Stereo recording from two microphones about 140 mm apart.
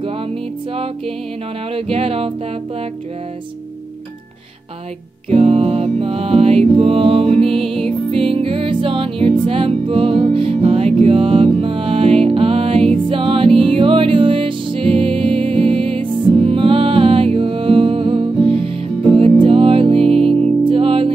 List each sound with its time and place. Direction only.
1.7 s music: 45° right (ahead or behind)
5.3 s music: 45° right (ahead or behind)
20.0 s music: centre (ahead or behind)
20.6 s music: 40° right (ahead or behind)